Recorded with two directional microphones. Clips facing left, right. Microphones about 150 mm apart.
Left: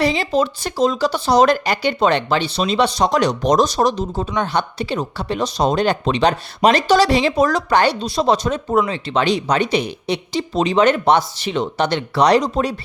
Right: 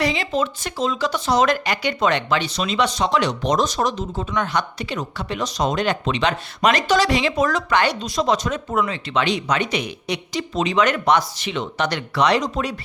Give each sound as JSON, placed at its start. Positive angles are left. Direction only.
{"t": 0.0, "sound": "speech", "side_deg": 35}